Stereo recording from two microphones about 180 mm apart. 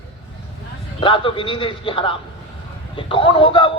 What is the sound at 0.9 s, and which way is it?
A man's voice, 30° left (ahead or behind).